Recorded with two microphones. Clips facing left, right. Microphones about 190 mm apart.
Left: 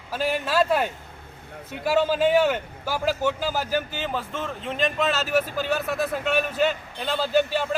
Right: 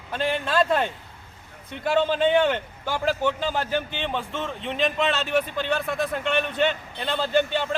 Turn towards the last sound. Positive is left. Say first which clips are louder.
# left 1 dB
turn(degrees=5)  # may be behind; listen again after turning